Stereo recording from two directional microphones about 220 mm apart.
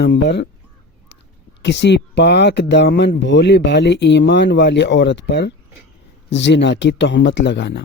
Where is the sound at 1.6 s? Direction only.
50° left (ahead or behind).